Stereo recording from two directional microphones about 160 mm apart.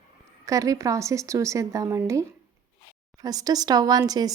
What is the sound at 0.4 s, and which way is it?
Speech, 20° right (ahead or behind).